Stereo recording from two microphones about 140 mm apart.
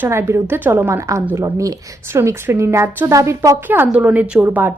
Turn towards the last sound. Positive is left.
turn(degrees=-10)  # may be behind; listen again after turning